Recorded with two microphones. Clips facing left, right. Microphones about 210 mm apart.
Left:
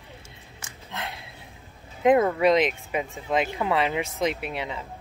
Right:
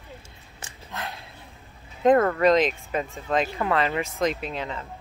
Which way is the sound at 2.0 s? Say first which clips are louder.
Right 1 dB; 10° left (ahead or behind).